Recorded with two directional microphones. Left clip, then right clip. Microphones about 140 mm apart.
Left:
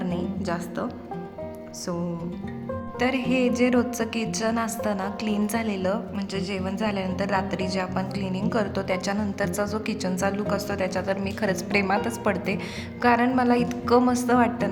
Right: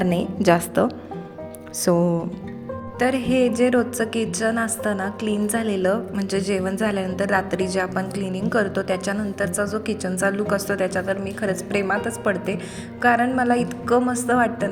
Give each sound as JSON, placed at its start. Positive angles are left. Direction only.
{"t": 0.0, "sound": "music", "side_deg": -50}
{"t": 1.8, "sound": "music", "side_deg": -40}
{"t": 3.0, "sound": "a woman's voice", "side_deg": -15}